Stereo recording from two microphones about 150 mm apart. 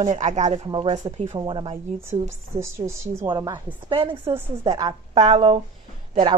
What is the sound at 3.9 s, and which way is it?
Speech, 35° right (ahead or behind).